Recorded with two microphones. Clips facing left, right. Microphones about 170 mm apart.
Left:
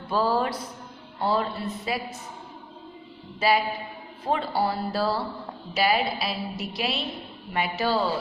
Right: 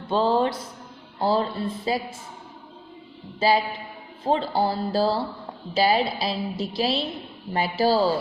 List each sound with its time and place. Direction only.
0.1 s a woman's voice: 25° right (ahead or behind)
3.4 s a woman's voice: 25° right (ahead or behind)